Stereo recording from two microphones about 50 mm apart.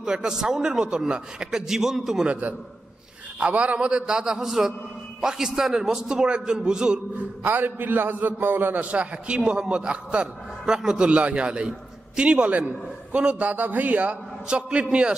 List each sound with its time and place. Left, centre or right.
0.0 s a man's voice: centre
3.3 s a man's voice: right
7.2 s a man's voice: right
8.8 s a man's voice: right